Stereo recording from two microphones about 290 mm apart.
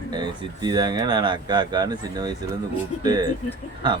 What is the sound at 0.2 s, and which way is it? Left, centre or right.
Speech, centre.